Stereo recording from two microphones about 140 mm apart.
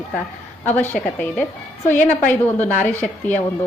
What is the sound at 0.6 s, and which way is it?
Speech, 15° left (ahead or behind).